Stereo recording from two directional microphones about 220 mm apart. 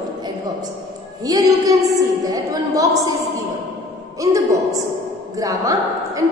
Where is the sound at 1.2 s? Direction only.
15° right (ahead or behind).